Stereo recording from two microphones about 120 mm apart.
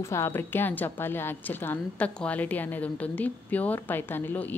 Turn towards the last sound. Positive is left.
turn(degrees=15)  # may be behind; listen again after turning